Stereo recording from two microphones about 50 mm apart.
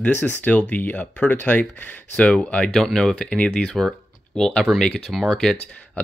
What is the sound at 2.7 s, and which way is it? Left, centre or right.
Speech, centre.